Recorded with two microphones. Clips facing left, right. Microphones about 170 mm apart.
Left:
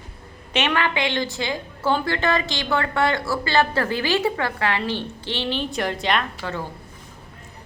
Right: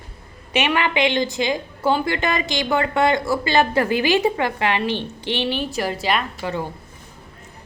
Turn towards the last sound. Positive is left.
turn(degrees=-15)  # may be behind; listen again after turning